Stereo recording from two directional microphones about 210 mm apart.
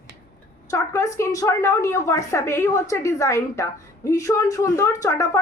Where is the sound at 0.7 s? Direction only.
15° left (ahead or behind).